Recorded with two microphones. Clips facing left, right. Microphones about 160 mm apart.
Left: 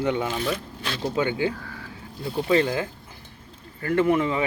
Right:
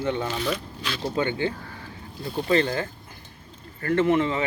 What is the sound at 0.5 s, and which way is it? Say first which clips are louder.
Speech: left 1 dB; 45° left (ahead or behind).